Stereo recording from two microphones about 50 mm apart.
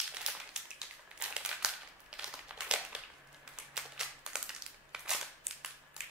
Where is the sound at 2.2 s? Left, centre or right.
Centre.